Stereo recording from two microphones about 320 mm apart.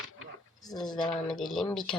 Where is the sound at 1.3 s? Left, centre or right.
Centre.